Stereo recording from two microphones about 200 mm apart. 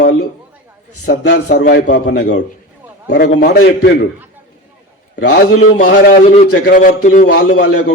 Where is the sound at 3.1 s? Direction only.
50° left (ahead or behind).